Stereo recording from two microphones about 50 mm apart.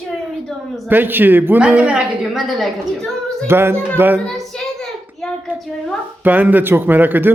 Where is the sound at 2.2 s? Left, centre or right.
Centre.